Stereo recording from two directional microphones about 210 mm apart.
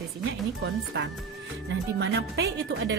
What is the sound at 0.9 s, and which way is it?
A woman's voice, 60° right (ahead or behind).